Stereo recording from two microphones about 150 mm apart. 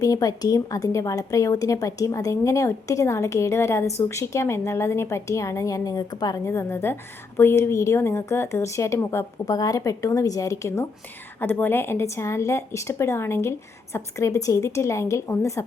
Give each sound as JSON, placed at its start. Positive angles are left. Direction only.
{"t": 0.0, "sound": "a woman's voice", "side_deg": 25}